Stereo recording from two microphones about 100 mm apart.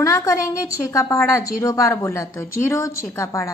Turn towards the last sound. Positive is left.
turn(degrees=30)  # may be behind; listen again after turning